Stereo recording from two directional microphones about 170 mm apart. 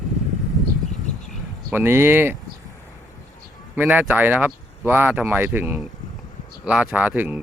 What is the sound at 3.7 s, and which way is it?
Speech, 10° right (ahead or behind).